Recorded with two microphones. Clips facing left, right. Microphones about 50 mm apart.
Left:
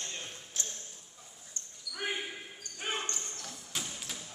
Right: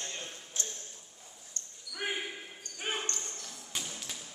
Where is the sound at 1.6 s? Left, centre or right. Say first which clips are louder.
Right 1 dB; centre.